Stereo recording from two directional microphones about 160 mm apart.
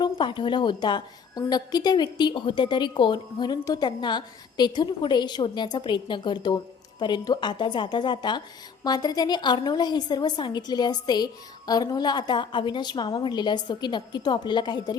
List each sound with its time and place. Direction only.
0.0 s a woman's voice: 30° left (ahead or behind)